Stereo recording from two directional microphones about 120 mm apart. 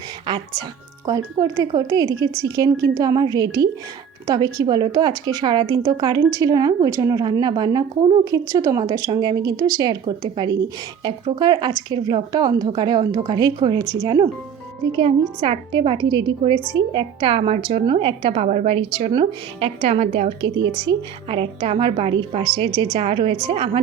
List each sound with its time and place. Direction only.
0.3 s a woman's voice: 40° right (ahead or behind)
14.9 s a woman's voice: 45° right (ahead or behind)
18.4 s a woman's voice: 65° right (ahead or behind)
20.6 s a woman's voice: 45° right (ahead or behind)